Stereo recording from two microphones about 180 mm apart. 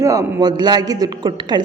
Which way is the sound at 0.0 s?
15° right (ahead or behind).